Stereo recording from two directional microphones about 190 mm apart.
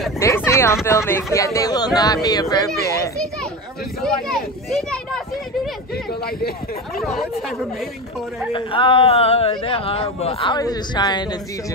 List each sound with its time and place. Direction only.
0.2 s speech: 15° left (ahead or behind)
4.0 s speech: centre (ahead or behind)
7.0 s speech: centre (ahead or behind)
8.5 s a man's voice: 25° left (ahead or behind)